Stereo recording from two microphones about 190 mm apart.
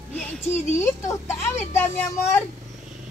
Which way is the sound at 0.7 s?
15° left (ahead or behind).